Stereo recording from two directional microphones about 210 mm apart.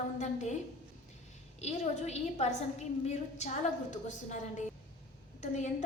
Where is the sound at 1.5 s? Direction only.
30° left (ahead or behind).